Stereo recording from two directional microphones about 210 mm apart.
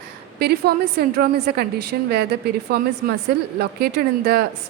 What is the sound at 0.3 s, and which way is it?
A woman's voice, 50° right (ahead or behind).